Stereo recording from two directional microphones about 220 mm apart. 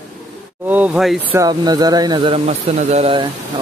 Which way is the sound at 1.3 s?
15° right (ahead or behind).